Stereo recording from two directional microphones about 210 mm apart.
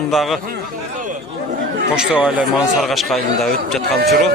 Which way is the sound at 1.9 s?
5° right (ahead or behind).